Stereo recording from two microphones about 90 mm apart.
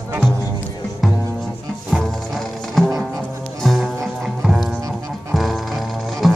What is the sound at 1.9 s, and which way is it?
Ratchet, 10° right (ahead or behind).